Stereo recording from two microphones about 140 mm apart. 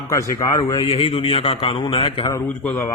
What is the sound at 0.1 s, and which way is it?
Speech, 20° left (ahead or behind).